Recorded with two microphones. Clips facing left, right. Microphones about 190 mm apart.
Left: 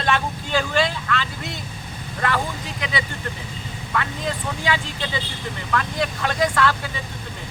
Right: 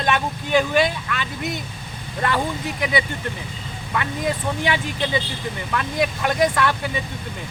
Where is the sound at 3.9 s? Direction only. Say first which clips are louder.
Right 2 dB; 20° right (ahead or behind).